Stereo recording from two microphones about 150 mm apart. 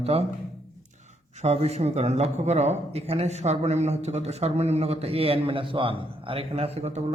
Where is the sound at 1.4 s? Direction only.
45° right (ahead or behind).